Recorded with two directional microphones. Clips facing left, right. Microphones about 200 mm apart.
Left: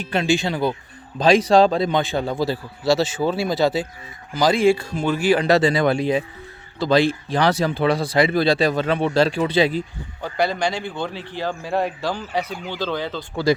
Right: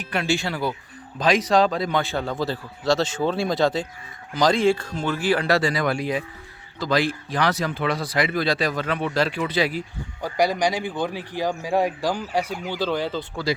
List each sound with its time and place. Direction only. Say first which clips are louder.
0.0 s a man's voice: left 4 dB; 25° left (ahead or behind)
10.2 s a man's voice: right 1 dB; 10° right (ahead or behind)